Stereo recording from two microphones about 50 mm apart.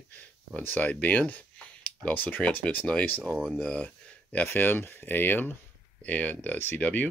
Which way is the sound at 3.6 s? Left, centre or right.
Left.